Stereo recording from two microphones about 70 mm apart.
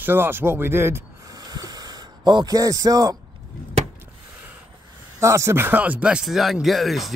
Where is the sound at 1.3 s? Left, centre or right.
Right.